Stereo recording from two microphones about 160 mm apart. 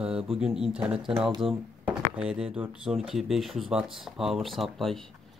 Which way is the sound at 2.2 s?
5° right (ahead or behind).